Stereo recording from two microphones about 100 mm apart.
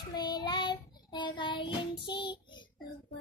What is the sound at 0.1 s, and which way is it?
Child singing, 45° left (ahead or behind).